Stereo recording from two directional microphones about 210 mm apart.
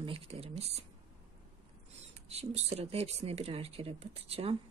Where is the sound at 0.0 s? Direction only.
25° right (ahead or behind).